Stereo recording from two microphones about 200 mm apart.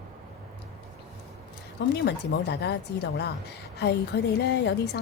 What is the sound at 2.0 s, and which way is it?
A woman's voice, 55° left (ahead or behind).